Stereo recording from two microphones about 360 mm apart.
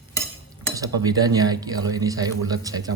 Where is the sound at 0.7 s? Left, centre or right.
Centre.